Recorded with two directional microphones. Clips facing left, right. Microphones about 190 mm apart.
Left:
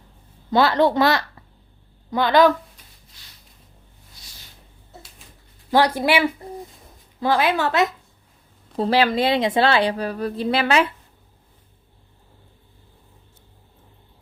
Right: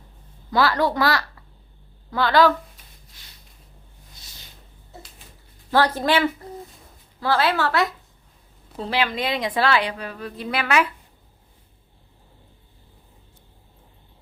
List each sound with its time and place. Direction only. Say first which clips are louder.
0.5 s a woman's voice: left 4 dB; 25° left (ahead or behind)
5.7 s a woman's voice: left 2 dB; 15° left (ahead or behind)
8.7 s a woman's voice: left 6 dB; 40° left (ahead or behind)